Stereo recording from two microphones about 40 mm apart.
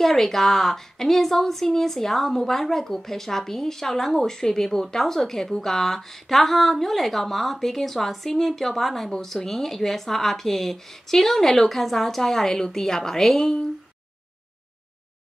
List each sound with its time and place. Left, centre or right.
0.0 s a woman's voice: centre